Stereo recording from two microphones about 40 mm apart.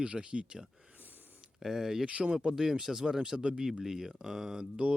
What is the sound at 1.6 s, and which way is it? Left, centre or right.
Speech, centre.